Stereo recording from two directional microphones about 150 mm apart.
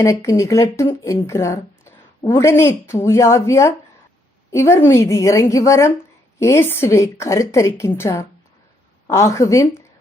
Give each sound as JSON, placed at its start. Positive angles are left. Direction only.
{"t": 0.0, "sound": "a woman's voice", "side_deg": 20}